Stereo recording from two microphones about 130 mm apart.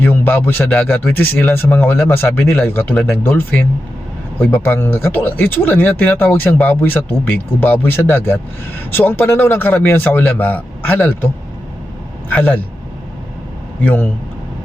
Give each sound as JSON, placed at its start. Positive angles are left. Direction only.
{"t": 0.0, "sound": "speech", "side_deg": 15}
{"t": 2.9, "sound": "speech", "side_deg": 5}
{"t": 3.2, "sound": "speech", "side_deg": 15}
{"t": 12.3, "sound": "speech", "side_deg": 10}
{"t": 13.8, "sound": "speech", "side_deg": 15}